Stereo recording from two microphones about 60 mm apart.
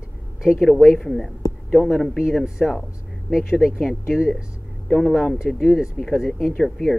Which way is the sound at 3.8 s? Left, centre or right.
Centre.